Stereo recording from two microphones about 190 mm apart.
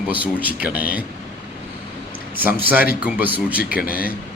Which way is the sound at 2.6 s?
10° right (ahead or behind).